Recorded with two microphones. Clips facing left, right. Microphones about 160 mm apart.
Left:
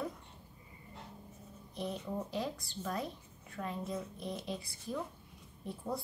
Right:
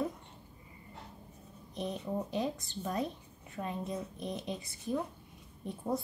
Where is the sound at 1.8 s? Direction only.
20° right (ahead or behind).